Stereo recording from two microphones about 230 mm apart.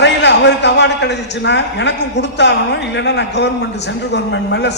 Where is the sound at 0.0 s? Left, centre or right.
Left.